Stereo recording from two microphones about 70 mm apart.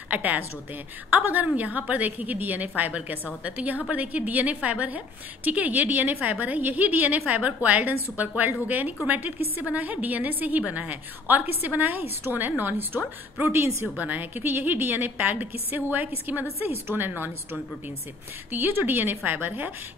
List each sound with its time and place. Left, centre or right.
0.1 s a woman's voice: right
13.9 s a woman's voice: right